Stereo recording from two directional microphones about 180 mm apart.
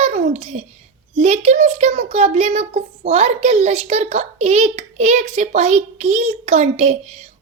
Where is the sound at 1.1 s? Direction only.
35° right (ahead or behind).